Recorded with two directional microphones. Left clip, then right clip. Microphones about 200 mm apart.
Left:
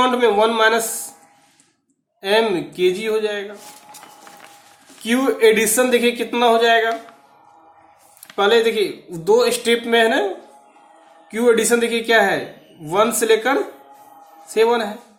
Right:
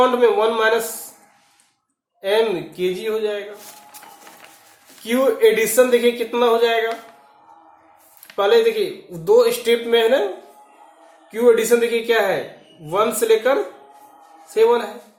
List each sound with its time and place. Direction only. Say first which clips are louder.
0.0 s speech: even; 50° left (ahead or behind)
2.2 s speech: left 1 dB; 50° left (ahead or behind)
5.0 s speech: even; 50° left (ahead or behind)
8.4 s speech: even; 50° left (ahead or behind)
11.3 s speech: right 1 dB; 50° left (ahead or behind)